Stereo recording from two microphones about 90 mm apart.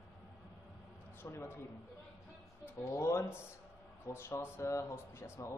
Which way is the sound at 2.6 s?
30° left (ahead or behind).